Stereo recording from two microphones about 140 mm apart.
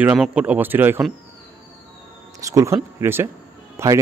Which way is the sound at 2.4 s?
20° right (ahead or behind).